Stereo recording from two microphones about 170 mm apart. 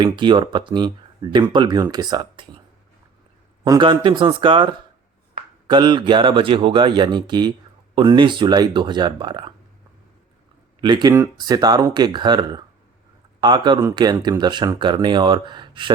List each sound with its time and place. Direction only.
0.0 s speech: 30° right (ahead or behind)
3.6 s speech: 25° right (ahead or behind)
10.8 s speech: 25° right (ahead or behind)